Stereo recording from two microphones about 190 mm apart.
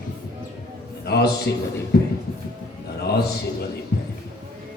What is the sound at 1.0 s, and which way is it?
Speech, 60° left (ahead or behind).